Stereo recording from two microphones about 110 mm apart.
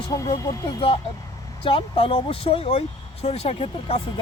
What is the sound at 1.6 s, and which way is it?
Speech, 55° left (ahead or behind).